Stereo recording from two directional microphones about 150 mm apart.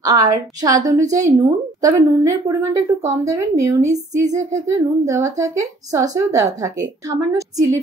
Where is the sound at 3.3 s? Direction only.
20° right (ahead or behind).